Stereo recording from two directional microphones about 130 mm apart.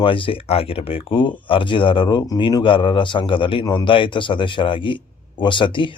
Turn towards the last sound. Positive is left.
turn(degrees=40)  # may be behind; listen again after turning